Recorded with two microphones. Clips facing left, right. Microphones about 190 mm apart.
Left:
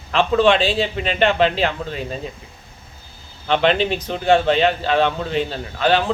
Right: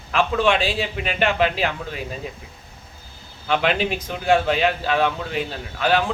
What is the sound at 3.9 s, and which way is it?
Speech, 35° left (ahead or behind).